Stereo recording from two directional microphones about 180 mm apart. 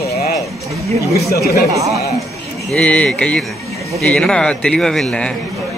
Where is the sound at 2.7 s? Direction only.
5° left (ahead or behind).